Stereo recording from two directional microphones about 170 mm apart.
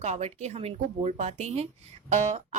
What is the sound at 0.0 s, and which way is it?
A woman's voice, 40° right (ahead or behind).